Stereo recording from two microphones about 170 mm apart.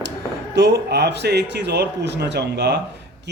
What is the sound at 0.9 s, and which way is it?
Speech, 80° right.